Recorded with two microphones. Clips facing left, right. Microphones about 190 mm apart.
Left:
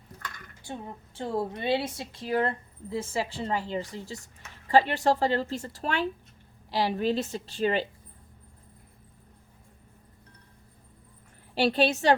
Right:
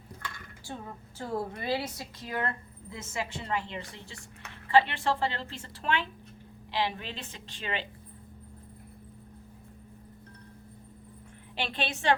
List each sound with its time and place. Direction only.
0.6 s a woman's voice: 20° left (ahead or behind); by 7.9 s 40° left (ahead or behind)
11.5 s a woman's voice: 40° left (ahead or behind)